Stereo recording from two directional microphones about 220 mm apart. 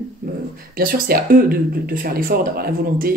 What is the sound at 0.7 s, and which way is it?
Speech, 40° right (ahead or behind).